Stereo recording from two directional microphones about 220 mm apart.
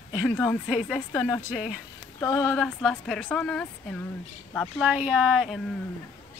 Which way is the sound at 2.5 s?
5° left (ahead or behind).